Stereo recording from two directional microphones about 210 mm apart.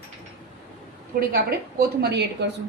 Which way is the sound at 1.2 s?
45° right (ahead or behind).